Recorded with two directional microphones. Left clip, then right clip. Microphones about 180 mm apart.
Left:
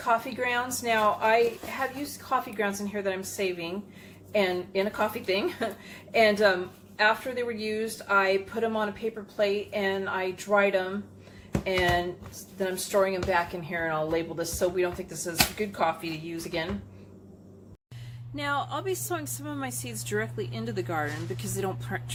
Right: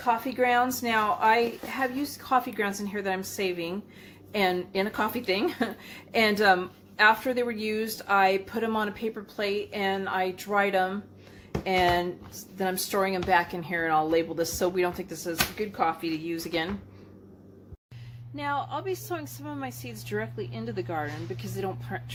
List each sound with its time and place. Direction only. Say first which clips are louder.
0.0 s speech: right 1 dB; 30° right (ahead or behind)
18.3 s a woman's voice: left 1 dB; centre (ahead or behind)